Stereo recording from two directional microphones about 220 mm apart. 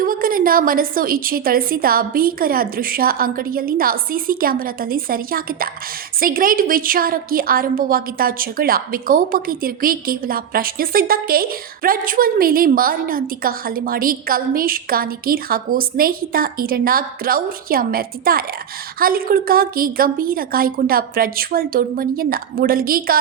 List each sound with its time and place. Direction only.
0.0 s a woman's voice: 40° right (ahead or behind)